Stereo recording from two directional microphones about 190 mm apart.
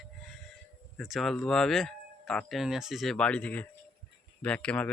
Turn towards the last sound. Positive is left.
turn(degrees=5)  # may be behind; listen again after turning